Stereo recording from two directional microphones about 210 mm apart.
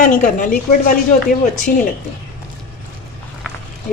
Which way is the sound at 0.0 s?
40° left (ahead or behind).